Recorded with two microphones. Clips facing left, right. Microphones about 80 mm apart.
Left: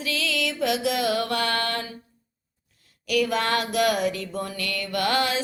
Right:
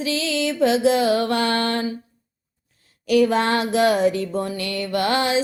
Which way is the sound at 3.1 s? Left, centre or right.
Right.